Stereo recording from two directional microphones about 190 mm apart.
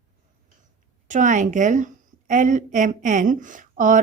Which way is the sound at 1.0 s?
40° right (ahead or behind).